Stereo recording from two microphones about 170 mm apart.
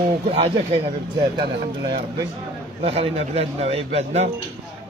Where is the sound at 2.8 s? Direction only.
35° right (ahead or behind).